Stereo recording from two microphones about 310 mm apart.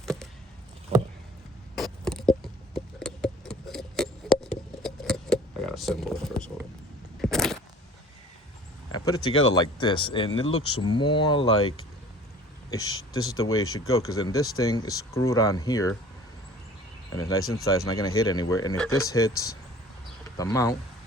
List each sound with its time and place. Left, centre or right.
0.0 s a sound: centre
1.7 s patter: centre
4.8 s a sound: centre
9.0 s speech: centre
9.3 s speech: left
9.6 s speech: centre
10.4 s speech: left
10.8 s speech: centre
11.5 s speech: left
13.7 s speech: centre
17.2 s speech: centre